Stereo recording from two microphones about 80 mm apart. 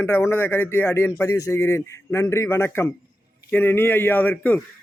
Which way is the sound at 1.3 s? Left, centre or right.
Left.